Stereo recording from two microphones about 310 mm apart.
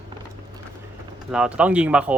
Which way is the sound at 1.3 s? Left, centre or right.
Centre.